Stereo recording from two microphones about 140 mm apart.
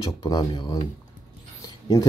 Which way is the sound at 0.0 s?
30° left (ahead or behind).